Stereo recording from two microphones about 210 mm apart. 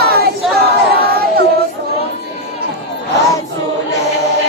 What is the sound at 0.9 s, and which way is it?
Crowd, 45° right (ahead or behind).